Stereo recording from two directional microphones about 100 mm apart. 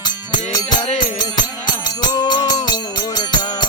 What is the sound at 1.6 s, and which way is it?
Music, 45° left (ahead or behind).